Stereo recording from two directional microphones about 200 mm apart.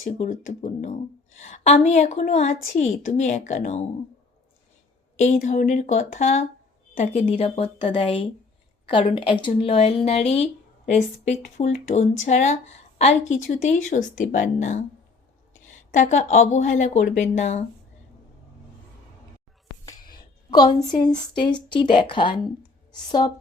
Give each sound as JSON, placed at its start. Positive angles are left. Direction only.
{"t": 0.0, "sound": "speech", "side_deg": 40}
{"t": 5.2, "sound": "speech", "side_deg": 35}
{"t": 15.9, "sound": "speech", "side_deg": 35}
{"t": 20.5, "sound": "a woman's voice", "side_deg": 20}